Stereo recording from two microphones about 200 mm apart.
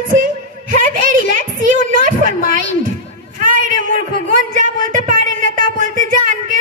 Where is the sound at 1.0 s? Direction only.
40° right (ahead or behind).